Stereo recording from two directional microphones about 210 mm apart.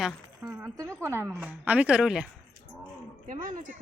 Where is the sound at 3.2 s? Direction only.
40° right (ahead or behind).